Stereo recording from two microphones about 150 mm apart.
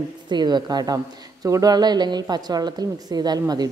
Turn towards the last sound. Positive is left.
turn(degrees=-25)  # may be behind; listen again after turning